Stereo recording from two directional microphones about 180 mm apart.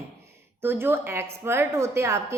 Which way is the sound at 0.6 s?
10° right (ahead or behind).